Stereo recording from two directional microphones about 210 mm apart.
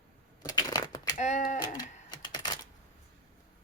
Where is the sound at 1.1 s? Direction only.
35° left (ahead or behind).